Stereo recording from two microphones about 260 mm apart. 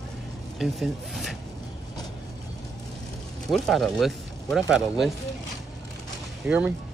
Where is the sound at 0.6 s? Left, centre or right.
Centre.